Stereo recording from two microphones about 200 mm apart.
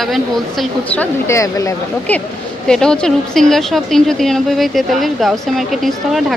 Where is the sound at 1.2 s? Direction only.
15° left (ahead or behind).